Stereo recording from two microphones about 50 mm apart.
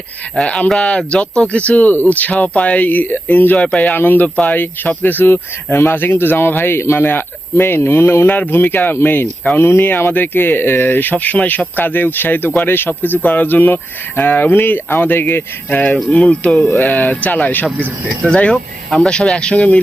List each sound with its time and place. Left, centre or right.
0.3 s speech: centre; by 9.2 s left
9.6 s speech: left
16.1 s speech: left
16.5 s speech: centre
16.7 s speech: left